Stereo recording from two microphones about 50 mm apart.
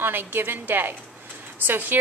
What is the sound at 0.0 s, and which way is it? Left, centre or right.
A woman's voice, right.